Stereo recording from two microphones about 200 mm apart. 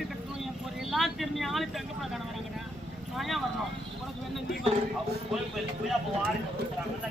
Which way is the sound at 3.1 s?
Centre (ahead or behind).